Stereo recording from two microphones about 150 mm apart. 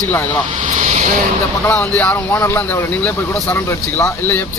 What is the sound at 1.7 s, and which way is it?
Speech, 10° left (ahead or behind).